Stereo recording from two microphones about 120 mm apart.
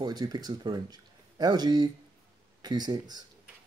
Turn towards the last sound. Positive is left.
turn(degrees=-35)  # may be behind; listen again after turning